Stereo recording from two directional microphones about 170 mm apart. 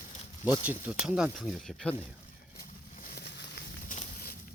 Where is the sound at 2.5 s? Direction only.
55° left (ahead or behind); by 3.6 s 80° left.